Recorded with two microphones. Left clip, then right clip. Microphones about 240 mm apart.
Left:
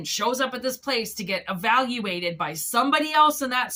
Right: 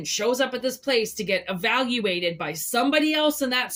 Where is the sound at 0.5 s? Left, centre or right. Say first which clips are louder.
Right 3 dB; centre.